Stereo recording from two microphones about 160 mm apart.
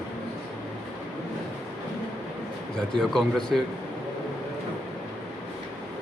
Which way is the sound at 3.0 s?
5° left (ahead or behind).